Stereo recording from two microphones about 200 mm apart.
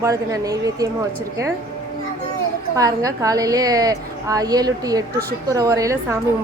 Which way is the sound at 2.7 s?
15° right (ahead or behind).